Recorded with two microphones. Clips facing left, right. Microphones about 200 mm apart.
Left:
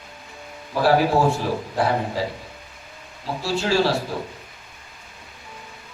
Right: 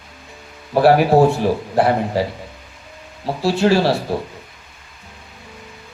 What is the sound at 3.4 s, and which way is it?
Speech, 65° right (ahead or behind).